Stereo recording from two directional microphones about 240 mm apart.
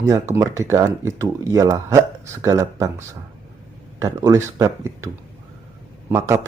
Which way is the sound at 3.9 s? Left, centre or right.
Centre.